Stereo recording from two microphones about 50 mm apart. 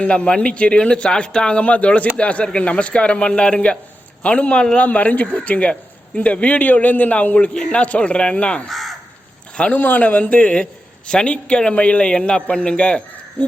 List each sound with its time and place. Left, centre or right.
0.0 s a man's voice: left
4.9 s a man's voice: left
8.7 s crow: centre
9.7 s a man's voice: left